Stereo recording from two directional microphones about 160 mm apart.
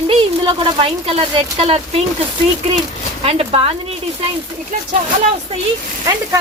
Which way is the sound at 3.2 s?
35° right (ahead or behind).